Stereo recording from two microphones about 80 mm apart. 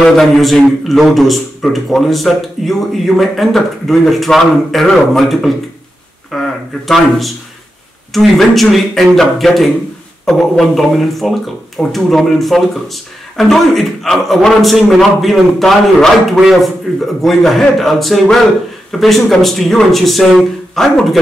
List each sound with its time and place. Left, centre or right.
0.0 s speech: centre